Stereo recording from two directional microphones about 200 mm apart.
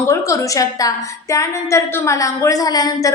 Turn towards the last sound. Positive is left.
turn(degrees=20)  # may be behind; listen again after turning